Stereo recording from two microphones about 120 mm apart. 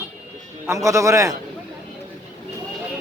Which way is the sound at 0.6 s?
25° right (ahead or behind).